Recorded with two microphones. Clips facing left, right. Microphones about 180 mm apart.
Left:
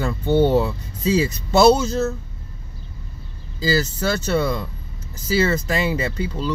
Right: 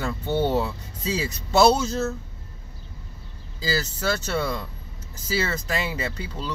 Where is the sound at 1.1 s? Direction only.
Centre (ahead or behind).